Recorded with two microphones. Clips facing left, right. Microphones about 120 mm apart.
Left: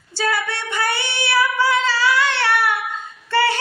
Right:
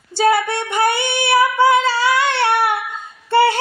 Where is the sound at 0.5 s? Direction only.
50° right (ahead or behind).